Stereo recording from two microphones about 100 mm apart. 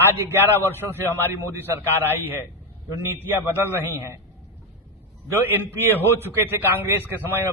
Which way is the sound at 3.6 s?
20° right (ahead or behind).